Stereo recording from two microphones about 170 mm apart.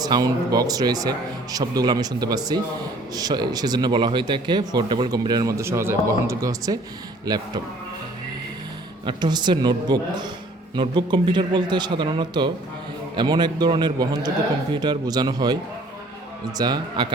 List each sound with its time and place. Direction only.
0.0 s speech: 25° right (ahead or behind)
9.0 s speech: 25° right (ahead or behind)
16.6 s speech: 25° right (ahead or behind)